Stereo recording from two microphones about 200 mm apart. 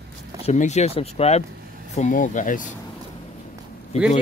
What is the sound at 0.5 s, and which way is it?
Speech, 35° left (ahead or behind).